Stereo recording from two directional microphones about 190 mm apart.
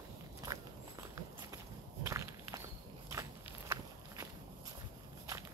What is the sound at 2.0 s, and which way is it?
Walk, 15° right (ahead or behind).